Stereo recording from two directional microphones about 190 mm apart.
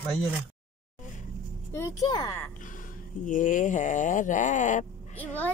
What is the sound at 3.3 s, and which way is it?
A woman's voice, 45° left (ahead or behind).